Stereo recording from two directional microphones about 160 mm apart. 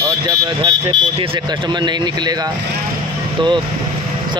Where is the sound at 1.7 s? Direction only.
30° right (ahead or behind).